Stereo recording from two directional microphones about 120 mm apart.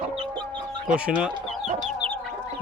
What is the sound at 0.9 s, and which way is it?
Speech, 10° right (ahead or behind).